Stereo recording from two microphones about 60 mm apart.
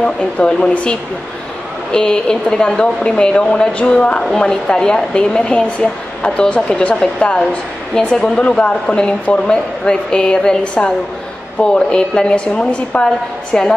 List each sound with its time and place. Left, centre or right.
0.0 s speech: centre